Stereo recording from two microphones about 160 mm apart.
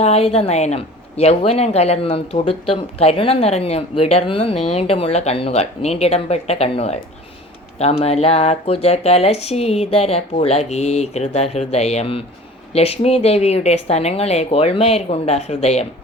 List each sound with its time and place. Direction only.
0.0 s a woman's voice: 40° left (ahead or behind)